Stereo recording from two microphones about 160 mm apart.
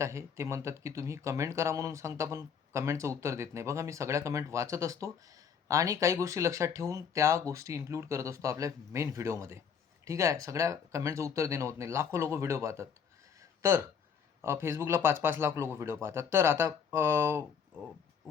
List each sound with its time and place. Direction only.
0.0 s speech: 20° right (ahead or behind)
13.4 s a sound: 15° right (ahead or behind)
14.4 s speech: 15° right (ahead or behind)